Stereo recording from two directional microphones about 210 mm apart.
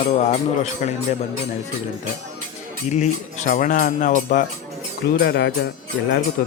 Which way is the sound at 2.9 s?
35° left (ahead or behind).